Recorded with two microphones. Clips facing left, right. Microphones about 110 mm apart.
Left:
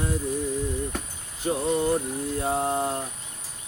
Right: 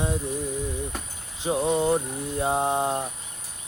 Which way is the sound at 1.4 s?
20° right (ahead or behind).